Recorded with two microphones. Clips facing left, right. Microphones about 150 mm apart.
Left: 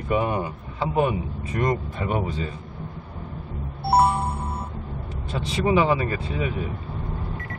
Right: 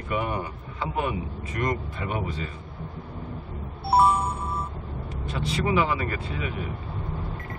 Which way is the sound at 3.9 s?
70° left (ahead or behind).